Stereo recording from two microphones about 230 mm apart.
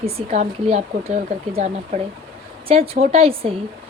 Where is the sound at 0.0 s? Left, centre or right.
Right.